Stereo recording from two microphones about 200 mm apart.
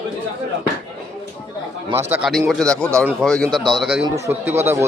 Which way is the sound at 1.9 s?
10° right (ahead or behind).